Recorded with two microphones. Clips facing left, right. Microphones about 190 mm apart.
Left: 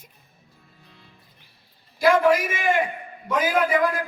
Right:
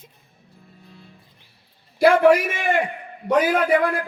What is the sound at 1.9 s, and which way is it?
A man's voice, 65° right (ahead or behind).